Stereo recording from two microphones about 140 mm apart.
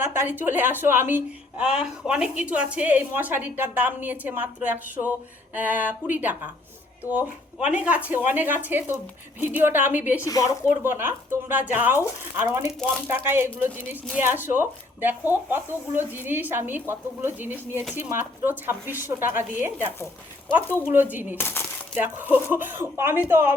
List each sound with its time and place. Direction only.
0.0 s speech: 15° right (ahead or behind)
10.2 s speech: 25° left (ahead or behind)
10.7 s speech: 15° right (ahead or behind)
20.9 s speech: 15° right (ahead or behind)
21.3 s speech: 15° left (ahead or behind)
21.9 s speech: 15° right (ahead or behind)